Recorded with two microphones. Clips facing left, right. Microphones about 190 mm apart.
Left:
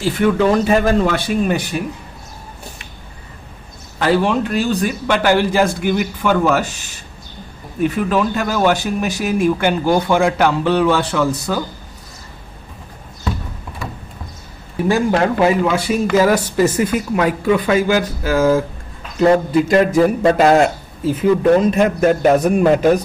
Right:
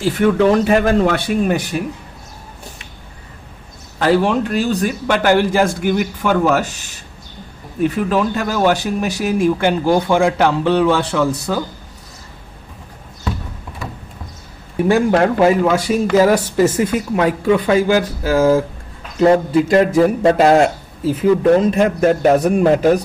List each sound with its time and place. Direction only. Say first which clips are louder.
0.2 s speech: right 1 dB; 65° right (ahead or behind); by 1.8 s 45° right (ahead or behind)
4.0 s a man's voice: right 1 dB; 40° right (ahead or behind)
7.8 s speech: even; 35° right (ahead or behind)
14.9 s speech: right 2 dB; 60° right (ahead or behind); by 22.8 s 35° right (ahead or behind)